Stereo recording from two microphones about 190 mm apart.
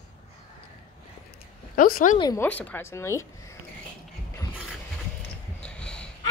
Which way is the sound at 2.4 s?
10° left (ahead or behind).